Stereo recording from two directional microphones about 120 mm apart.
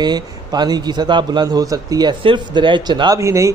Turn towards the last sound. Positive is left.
turn(degrees=-25)  # may be behind; listen again after turning